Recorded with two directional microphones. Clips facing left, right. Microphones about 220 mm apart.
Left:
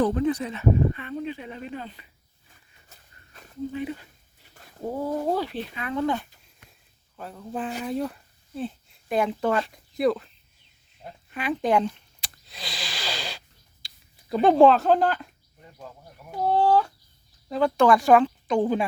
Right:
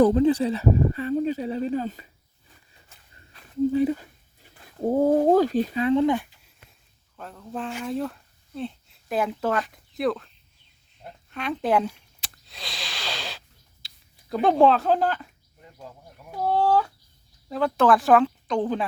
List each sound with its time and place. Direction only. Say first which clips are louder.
0.0 s speech: right 5 dB; 30° right (ahead or behind)
3.7 s speech: right 9 dB; 35° right (ahead or behind)
5.8 s speech: right 5 dB; 25° right (ahead or behind)
7.2 s speech: left 1 dB; centre (ahead or behind)
11.0 s a sound: left 1 dB; 5° left (ahead or behind)
13.8 s speech: left 3 dB; centre (ahead or behind)
16.3 s speech: left 1 dB; 5° right (ahead or behind)